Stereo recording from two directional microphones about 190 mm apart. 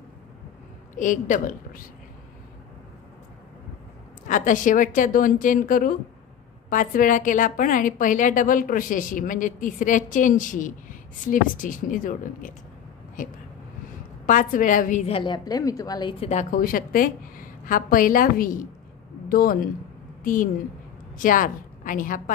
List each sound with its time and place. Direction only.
0.9 s a woman's voice: 40° left (ahead or behind)
4.3 s a woman's voice: 45° left (ahead or behind)
14.2 s a woman's voice: 45° left (ahead or behind)
21.2 s a woman's voice: 45° left (ahead or behind)